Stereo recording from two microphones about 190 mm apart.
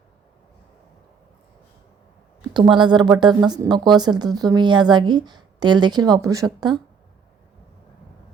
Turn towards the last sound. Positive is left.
turn(degrees=-20)  # may be behind; listen again after turning